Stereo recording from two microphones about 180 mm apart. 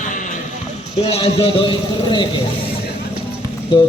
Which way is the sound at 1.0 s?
35° left (ahead or behind).